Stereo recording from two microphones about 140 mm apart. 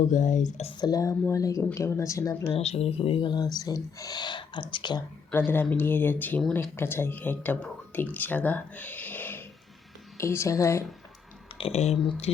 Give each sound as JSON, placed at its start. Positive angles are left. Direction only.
{"t": 0.0, "sound": "speech", "side_deg": 65}
{"t": 0.7, "sound": "speech", "side_deg": 30}
{"t": 2.5, "sound": "speech", "side_deg": 45}
{"t": 5.5, "sound": "speech", "side_deg": 15}
{"t": 11.5, "sound": "speech", "side_deg": 45}